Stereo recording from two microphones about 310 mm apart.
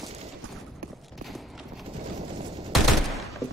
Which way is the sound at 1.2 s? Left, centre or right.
Centre.